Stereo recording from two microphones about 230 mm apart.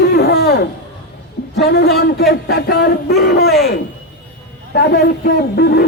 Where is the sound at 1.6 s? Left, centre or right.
Left.